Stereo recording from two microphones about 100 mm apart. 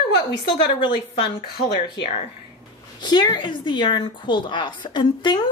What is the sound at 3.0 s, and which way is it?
Speech, 45° left (ahead or behind).